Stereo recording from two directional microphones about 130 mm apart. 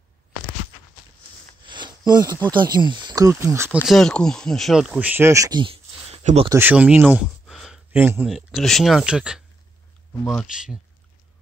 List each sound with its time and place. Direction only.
1.7 s a sound: 35° right (ahead or behind)
2.5 s speech: 35° right (ahead or behind); by 3.7 s 20° right (ahead or behind)
3.8 s speech: centre (ahead or behind); by 5.6 s 25° right (ahead or behind)
5.6 s a sound: 45° right (ahead or behind)
6.5 s speech: 15° right (ahead or behind)
8.0 s speech: 15° right (ahead or behind)
8.3 s speech: centre (ahead or behind)
10.4 s speech: 5° right (ahead or behind)